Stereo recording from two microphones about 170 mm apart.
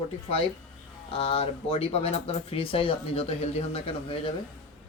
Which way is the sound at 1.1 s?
35° left (ahead or behind).